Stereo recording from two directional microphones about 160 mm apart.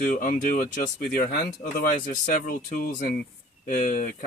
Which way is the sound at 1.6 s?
60° left (ahead or behind).